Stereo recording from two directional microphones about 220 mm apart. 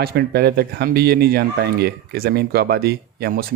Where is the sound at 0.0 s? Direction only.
45° right (ahead or behind).